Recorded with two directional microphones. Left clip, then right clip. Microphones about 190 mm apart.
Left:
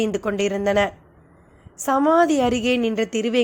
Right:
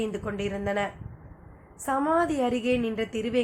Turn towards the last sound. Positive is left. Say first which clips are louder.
# left 6 dB
turn(degrees=50)  # may be behind; listen again after turning